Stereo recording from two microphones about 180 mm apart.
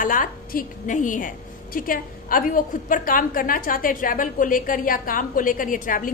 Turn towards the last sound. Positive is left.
turn(degrees=50)  # may be behind; listen again after turning